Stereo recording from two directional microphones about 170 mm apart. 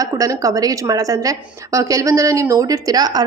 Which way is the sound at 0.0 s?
20° right (ahead or behind).